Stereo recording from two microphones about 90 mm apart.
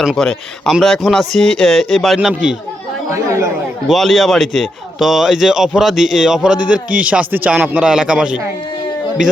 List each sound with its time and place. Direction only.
0.0 s speech: 5° right (ahead or behind)
3.1 s speech: 35° right (ahead or behind)
3.8 s speech: centre (ahead or behind)